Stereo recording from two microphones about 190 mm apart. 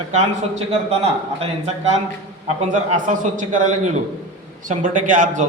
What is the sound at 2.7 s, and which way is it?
A man's voice, 45° right (ahead or behind).